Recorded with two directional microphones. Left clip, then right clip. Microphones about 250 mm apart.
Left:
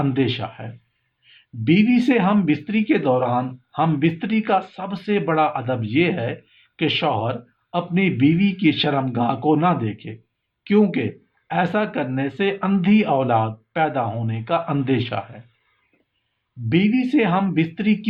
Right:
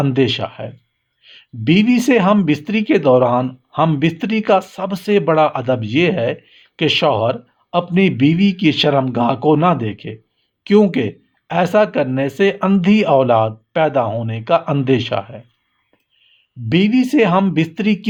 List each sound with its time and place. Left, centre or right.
0.0 s speech: right
16.6 s speech: right